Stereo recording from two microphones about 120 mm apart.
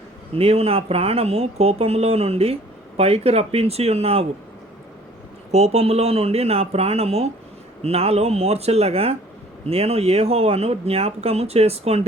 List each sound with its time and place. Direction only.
0.3 s speech: 55° right (ahead or behind)
5.5 s speech: 65° right (ahead or behind)